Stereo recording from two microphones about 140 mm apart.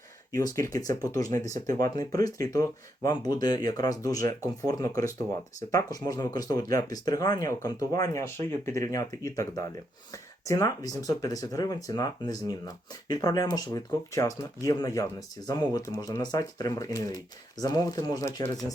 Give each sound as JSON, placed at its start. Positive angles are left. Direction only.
{"t": 0.3, "sound": "speech", "side_deg": 25}